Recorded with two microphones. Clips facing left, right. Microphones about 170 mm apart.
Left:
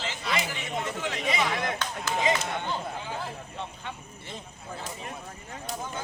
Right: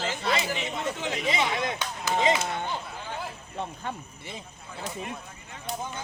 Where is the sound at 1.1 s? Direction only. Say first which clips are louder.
Right 1 dB; 25° right (ahead or behind).